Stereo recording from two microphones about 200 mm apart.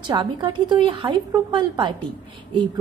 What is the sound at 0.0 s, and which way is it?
A woman's voice, 25° right (ahead or behind).